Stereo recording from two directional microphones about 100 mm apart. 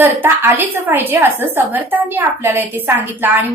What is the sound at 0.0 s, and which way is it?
A woman's voice, 20° right (ahead or behind).